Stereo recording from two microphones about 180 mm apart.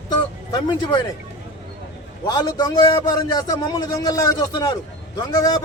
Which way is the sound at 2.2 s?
20° left (ahead or behind).